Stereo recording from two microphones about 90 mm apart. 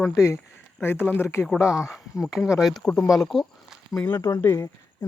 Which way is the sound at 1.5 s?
5° right (ahead or behind).